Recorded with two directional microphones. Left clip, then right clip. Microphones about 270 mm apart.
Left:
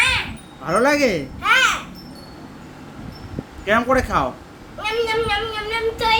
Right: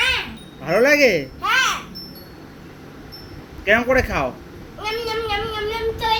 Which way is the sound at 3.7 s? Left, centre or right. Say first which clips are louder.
Right 1 dB; centre.